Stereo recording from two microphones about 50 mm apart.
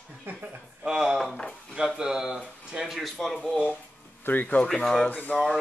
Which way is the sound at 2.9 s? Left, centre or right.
Centre.